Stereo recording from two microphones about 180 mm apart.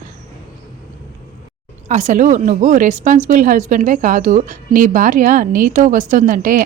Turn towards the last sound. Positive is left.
turn(degrees=-50)  # may be behind; listen again after turning